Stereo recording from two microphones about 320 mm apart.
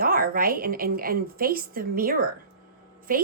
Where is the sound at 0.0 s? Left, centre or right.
Right.